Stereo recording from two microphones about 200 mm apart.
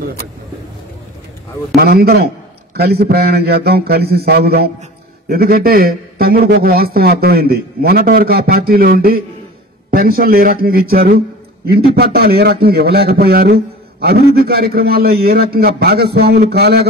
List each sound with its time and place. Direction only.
1.8 s a man's voice: 50° right (ahead or behind)